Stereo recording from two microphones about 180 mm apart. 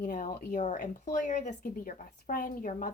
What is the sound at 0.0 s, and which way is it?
A woman's voice, 45° left (ahead or behind).